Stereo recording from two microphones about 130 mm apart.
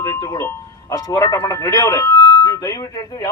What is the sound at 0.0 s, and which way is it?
A man's voice, 30° left (ahead or behind).